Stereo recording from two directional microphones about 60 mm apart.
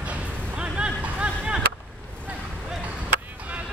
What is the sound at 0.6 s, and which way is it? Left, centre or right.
Music, centre.